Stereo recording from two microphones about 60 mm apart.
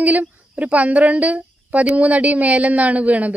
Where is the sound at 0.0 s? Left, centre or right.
Right.